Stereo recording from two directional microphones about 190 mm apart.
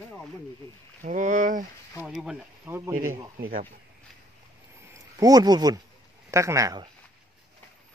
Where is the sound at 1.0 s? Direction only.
40° right (ahead or behind).